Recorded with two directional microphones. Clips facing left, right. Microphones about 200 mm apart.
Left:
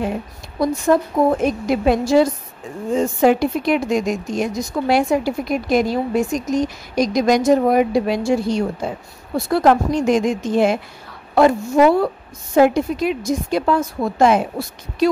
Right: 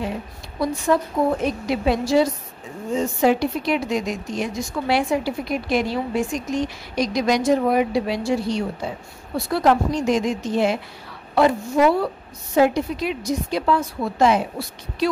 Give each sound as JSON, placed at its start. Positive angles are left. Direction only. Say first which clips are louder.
{"t": 0.9, "sound": "speech", "louder": "left 4 dB", "side_deg": 45}